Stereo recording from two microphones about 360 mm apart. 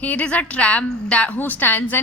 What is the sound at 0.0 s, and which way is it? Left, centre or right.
A woman's voice, centre.